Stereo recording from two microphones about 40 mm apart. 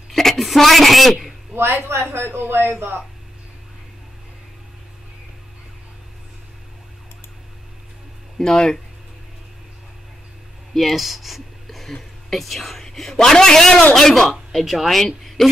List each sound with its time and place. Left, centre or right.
0.1 s a woman's voice: centre
1.5 s a man's voice: right
8.4 s speech: centre
10.7 s a sound: centre
12.0 s a woman's voice: centre
13.9 s speech: centre
14.6 s speech: centre